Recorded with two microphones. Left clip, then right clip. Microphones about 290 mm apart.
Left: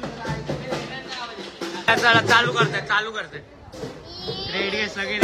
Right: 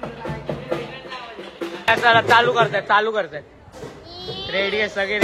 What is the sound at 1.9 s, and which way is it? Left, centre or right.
A man's voice, centre.